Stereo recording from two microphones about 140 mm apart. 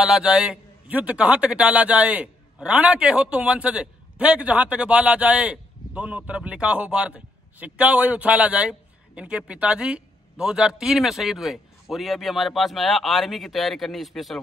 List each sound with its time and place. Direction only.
0.0 s a man's voice: 5° right (ahead or behind)